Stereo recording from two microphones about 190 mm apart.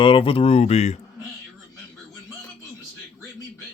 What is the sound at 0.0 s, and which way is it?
Speech, 25° left (ahead or behind).